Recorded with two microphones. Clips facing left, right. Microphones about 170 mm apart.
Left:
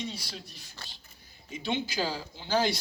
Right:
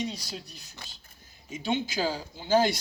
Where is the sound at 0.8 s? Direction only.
15° right (ahead or behind).